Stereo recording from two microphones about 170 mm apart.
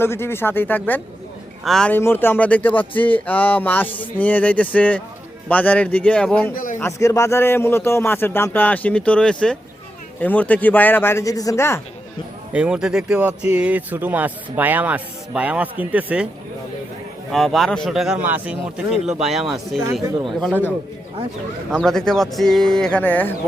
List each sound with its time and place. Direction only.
0.0 s a man's voice: 15° left (ahead or behind)
12.5 s speech: 5° right (ahead or behind)
17.3 s speech: centre (ahead or behind)
19.8 s speech: 25° right (ahead or behind)
20.4 s a man's voice: 10° left (ahead or behind)